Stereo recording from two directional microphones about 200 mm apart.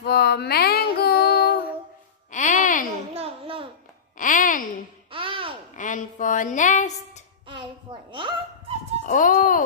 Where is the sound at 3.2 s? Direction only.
30° right (ahead or behind).